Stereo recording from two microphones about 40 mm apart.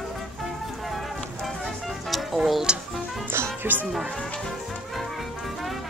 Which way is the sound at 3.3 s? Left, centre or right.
Right.